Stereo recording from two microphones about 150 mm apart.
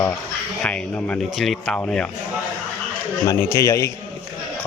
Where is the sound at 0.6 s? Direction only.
5° left (ahead or behind).